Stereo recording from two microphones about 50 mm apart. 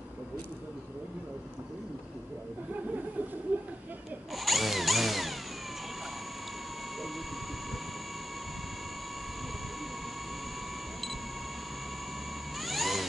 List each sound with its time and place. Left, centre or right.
3.5 s a sound: right
4.4 s drill: centre
12.5 s vehicle: centre